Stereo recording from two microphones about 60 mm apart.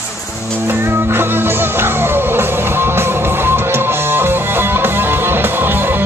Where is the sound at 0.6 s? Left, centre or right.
Right.